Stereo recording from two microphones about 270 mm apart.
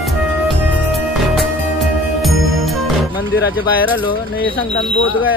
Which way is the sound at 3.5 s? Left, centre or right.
Left.